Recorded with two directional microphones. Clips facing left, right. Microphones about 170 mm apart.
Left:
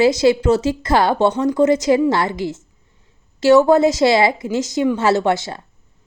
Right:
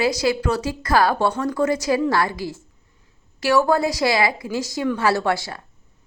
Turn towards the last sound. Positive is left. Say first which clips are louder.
# left 4 dB
turn(degrees=25)  # may be behind; listen again after turning